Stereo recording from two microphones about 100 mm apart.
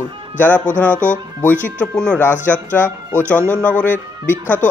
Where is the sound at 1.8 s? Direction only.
10° left (ahead or behind).